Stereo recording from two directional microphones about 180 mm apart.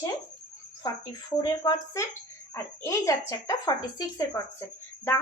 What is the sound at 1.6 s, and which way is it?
A woman's voice, 20° left (ahead or behind).